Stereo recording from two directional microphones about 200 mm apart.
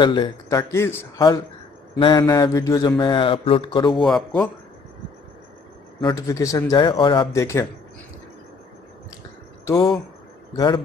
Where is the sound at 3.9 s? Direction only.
Centre (ahead or behind).